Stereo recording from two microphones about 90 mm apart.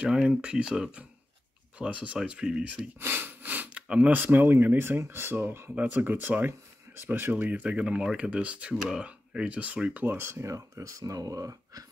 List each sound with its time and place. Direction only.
0.0 s speech: 10° right (ahead or behind)
3.0 s speech: 25° right (ahead or behind); by 11.8 s 40° right (ahead or behind)